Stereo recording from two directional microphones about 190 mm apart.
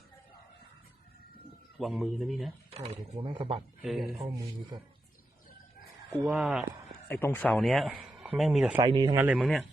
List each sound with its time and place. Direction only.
1.8 s speech: centre (ahead or behind)
2.7 s speech: 30° right (ahead or behind)
3.8 s speech: centre (ahead or behind)
6.2 s speech: centre (ahead or behind)
7.1 s speech: 10° left (ahead or behind)
8.8 s speech: 20° right (ahead or behind)
9.1 s speech: 5° right (ahead or behind)